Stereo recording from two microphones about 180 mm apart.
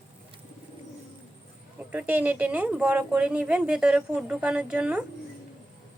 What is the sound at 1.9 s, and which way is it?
Speech, 10° right (ahead or behind).